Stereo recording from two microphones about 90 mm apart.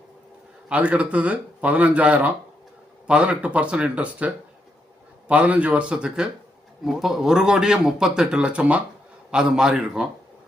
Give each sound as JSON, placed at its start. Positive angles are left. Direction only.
{"t": 0.7, "sound": "a man's voice", "side_deg": -15}
{"t": 5.3, "sound": "a man's voice", "side_deg": -15}